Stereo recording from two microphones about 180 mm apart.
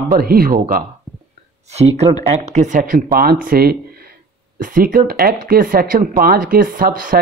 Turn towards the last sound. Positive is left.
turn(degrees=-50)  # may be behind; listen again after turning